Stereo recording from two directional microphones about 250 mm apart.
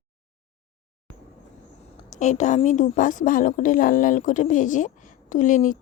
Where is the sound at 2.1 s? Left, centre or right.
Left.